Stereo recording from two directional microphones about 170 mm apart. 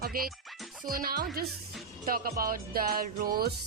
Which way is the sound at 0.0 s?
60° right (ahead or behind).